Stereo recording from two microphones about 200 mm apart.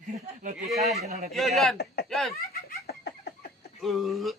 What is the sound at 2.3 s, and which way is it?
Laughter, 50° left (ahead or behind).